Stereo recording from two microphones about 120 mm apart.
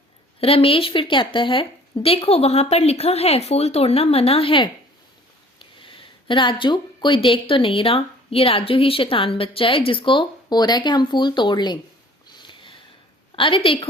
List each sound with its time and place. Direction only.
0.3 s speech: 55° left (ahead or behind); by 11.8 s 35° left (ahead or behind)
12.3 s sniff: 40° left (ahead or behind)
13.3 s speech: 45° left (ahead or behind)